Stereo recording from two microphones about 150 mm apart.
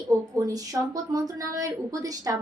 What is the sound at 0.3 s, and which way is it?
A woman's voice, 25° right (ahead or behind).